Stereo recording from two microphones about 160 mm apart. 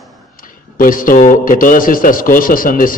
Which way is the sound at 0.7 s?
60° left (ahead or behind).